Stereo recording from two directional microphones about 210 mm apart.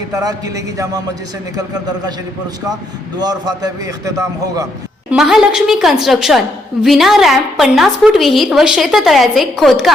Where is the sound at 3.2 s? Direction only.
20° right (ahead or behind).